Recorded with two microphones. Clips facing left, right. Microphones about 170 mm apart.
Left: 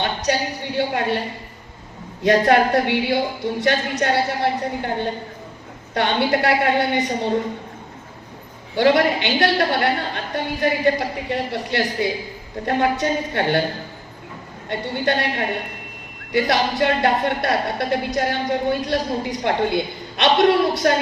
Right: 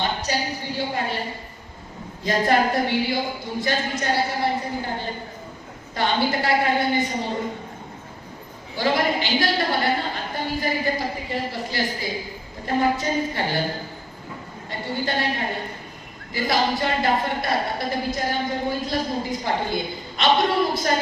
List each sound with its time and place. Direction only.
0.0 s a sound: 70° left (ahead or behind)
0.8 s speech: 70° left (ahead or behind)
2.2 s speech: 70° left (ahead or behind)
5.9 s speech: 70° left (ahead or behind)
8.7 s speech: 70° left (ahead or behind)
14.7 s speech: 70° left (ahead or behind)